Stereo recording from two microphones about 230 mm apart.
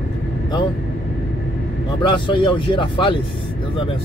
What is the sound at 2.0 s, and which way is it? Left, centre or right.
Speech, left.